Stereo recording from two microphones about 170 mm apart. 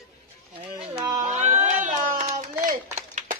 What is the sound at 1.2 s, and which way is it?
Speech, 40° right (ahead or behind).